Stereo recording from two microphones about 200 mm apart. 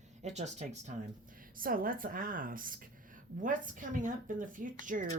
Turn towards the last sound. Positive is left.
turn(degrees=-40)  # may be behind; listen again after turning